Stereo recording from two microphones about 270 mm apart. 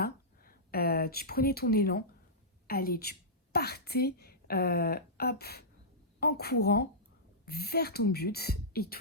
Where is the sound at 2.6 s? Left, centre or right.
Left.